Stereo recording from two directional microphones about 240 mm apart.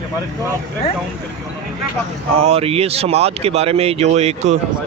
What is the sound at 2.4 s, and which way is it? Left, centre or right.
Speech, right.